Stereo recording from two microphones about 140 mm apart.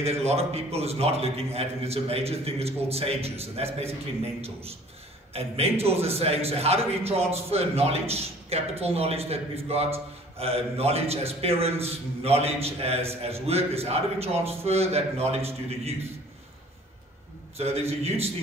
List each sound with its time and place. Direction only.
0.0 s a man's voice: 50° right (ahead or behind)
5.3 s a man's voice: 45° right (ahead or behind)
17.6 s a man's voice: 45° right (ahead or behind)